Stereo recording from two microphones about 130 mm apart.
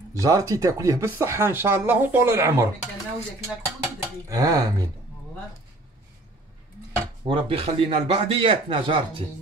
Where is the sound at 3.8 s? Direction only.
25° right (ahead or behind).